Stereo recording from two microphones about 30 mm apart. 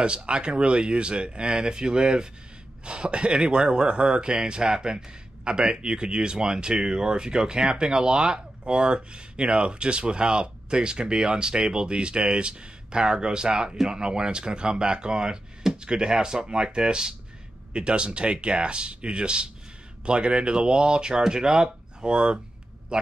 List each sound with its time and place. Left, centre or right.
0.0 s speech: right
2.8 s speech: right